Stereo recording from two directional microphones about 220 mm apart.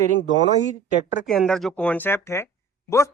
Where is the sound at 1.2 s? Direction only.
Centre (ahead or behind).